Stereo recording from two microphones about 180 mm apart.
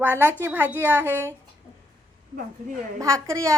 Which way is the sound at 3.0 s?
15° right (ahead or behind).